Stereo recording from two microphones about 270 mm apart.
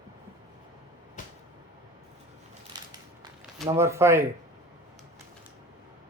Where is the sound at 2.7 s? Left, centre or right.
Centre.